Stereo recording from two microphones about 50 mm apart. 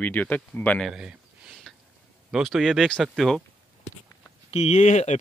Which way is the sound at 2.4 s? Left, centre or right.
Centre.